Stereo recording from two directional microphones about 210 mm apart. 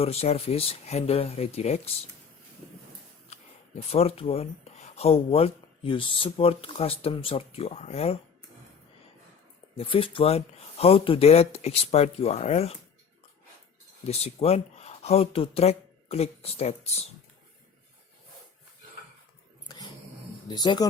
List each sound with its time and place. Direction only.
0.0 s speech: 30° left (ahead or behind)
3.3 s a sound: 30° left (ahead or behind)
3.8 s speech: 30° left (ahead or behind)
9.7 s speech: 25° left (ahead or behind)
14.1 s speech: 30° left (ahead or behind)
20.5 s speech: 20° left (ahead or behind)